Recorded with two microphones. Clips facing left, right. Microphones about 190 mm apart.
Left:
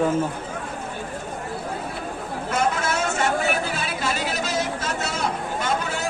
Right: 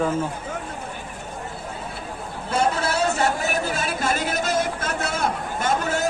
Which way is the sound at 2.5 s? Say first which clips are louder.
Right 2 dB; 30° right (ahead or behind).